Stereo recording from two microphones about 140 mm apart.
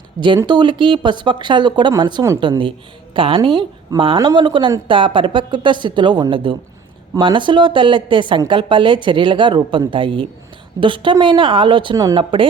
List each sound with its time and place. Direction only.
0.4 s a woman's voice: 30° right (ahead or behind)